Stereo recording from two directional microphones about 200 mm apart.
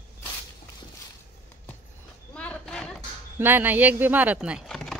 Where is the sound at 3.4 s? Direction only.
10° right (ahead or behind).